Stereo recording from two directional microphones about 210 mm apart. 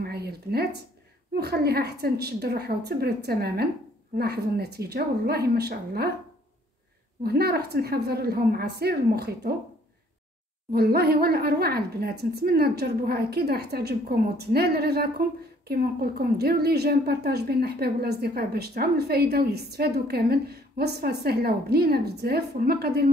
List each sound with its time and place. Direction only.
0.0 s a woman's voice: 50° right (ahead or behind)
7.2 s a woman's voice: 50° right (ahead or behind)
10.7 s a woman's voice: 45° right (ahead or behind)